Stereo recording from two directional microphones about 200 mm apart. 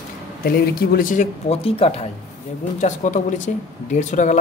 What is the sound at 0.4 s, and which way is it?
A man's voice, 50° left (ahead or behind).